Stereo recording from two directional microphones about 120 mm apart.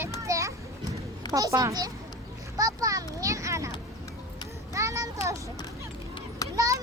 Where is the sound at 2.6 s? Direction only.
30° right (ahead or behind).